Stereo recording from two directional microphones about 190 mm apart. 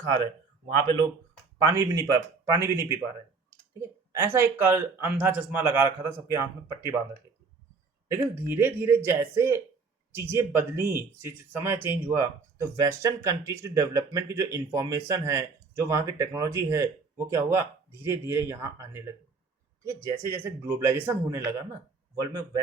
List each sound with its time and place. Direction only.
1.6 s speech: 15° right (ahead or behind)
8.0 s speech: 15° right (ahead or behind)